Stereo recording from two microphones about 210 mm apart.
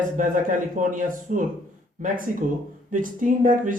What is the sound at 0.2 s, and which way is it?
A man's voice, 40° right (ahead or behind).